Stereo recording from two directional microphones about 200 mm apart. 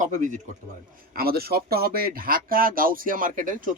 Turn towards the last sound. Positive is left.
turn(degrees=-40)  # may be behind; listen again after turning